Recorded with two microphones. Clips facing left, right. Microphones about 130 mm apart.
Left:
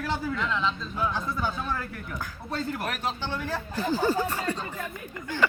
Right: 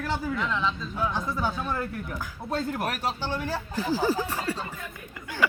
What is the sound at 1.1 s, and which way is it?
Speech, 15° right (ahead or behind).